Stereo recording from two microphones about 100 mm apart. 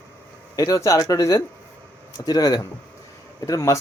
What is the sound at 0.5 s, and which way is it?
Speech, 35° left (ahead or behind).